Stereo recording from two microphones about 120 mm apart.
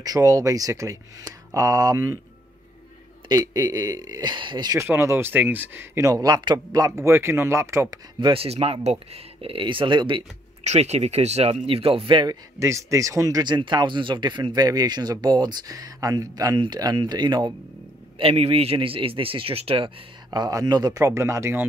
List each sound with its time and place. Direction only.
0.0 s speech: 30° right (ahead or behind)
3.3 s speech: 35° right (ahead or behind)
4.7 s speech: 20° right (ahead or behind)
8.2 s a man's voice: 50° right (ahead or behind)
10.6 s speech: 65° right (ahead or behind); by 12.4 s 40° right (ahead or behind)
12.5 s speech: 25° right (ahead or behind)
18.1 s a man's voice: 55° right (ahead or behind)
20.2 s speech: 30° right (ahead or behind)